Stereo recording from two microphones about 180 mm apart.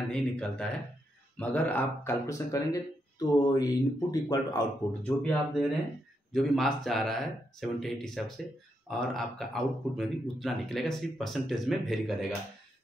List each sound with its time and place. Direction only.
0.1 s speech: 5° left (ahead or behind); by 4.6 s 20° left (ahead or behind)
5.0 s speech: 5° left (ahead or behind)